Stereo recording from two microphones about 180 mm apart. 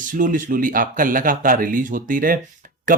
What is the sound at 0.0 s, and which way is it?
Speech, 45° right (ahead or behind).